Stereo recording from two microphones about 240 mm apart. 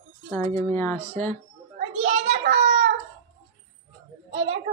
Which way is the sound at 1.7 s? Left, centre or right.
Right.